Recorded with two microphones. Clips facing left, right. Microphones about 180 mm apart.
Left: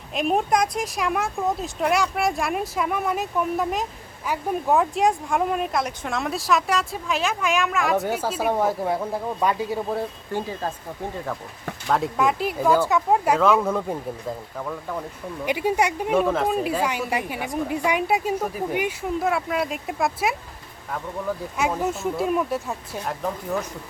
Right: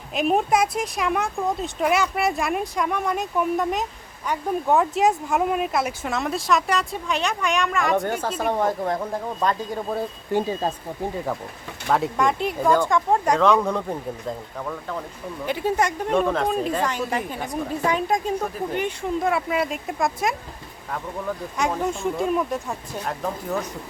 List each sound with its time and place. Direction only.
0.1 s speech: centre (ahead or behind)
10.3 s speech: 20° right (ahead or behind)
11.9 s speech: centre (ahead or behind)